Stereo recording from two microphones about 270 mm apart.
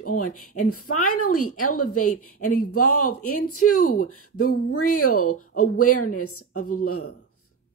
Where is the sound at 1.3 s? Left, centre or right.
Left.